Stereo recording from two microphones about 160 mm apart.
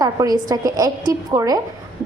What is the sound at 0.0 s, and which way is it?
A woman's voice, 25° right (ahead or behind).